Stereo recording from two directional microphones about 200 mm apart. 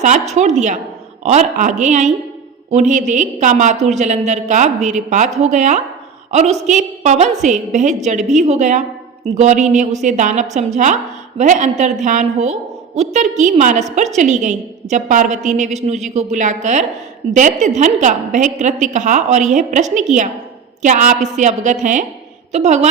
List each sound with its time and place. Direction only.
0.0 s a woman's voice: 35° right (ahead or behind)